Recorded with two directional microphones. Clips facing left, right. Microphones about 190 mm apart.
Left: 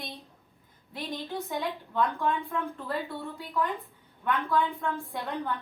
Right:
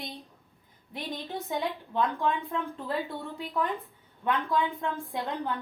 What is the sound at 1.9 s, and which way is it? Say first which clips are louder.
A woman's voice: even; 20° right (ahead or behind).